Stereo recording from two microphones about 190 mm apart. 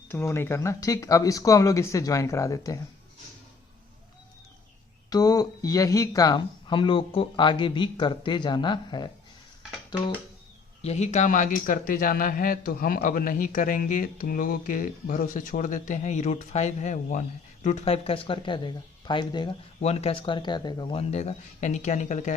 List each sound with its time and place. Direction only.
0.1 s speech: 10° left (ahead or behind)
5.0 s speech: 20° left (ahead or behind)
10.8 s a man's voice: 35° left (ahead or behind)